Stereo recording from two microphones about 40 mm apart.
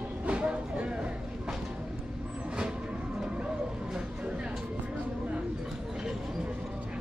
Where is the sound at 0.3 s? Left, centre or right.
Right.